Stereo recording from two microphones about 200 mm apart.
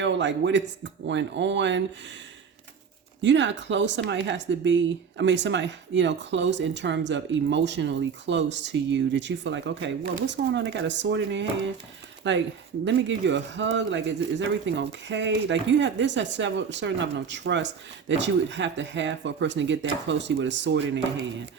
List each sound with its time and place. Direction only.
0.0 s a man's voice: 60° right (ahead or behind)
3.2 s speech: 65° right (ahead or behind)